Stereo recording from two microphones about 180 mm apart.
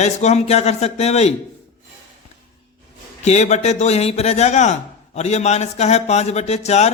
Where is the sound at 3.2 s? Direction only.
40° left (ahead or behind).